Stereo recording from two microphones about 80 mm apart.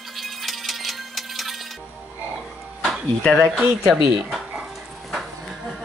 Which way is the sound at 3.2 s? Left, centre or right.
Centre.